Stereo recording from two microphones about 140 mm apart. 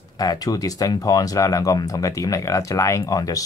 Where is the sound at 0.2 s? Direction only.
25° left (ahead or behind).